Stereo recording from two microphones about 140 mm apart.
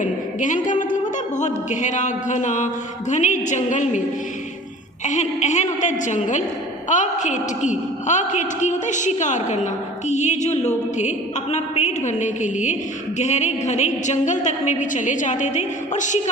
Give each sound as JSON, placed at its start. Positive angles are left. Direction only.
{"t": 0.0, "sound": "a man's voice", "side_deg": 65}
{"t": 5.0, "sound": "a woman's voice", "side_deg": 55}